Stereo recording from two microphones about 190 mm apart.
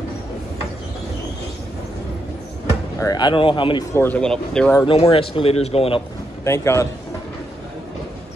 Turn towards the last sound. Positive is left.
turn(degrees=15)  # may be behind; listen again after turning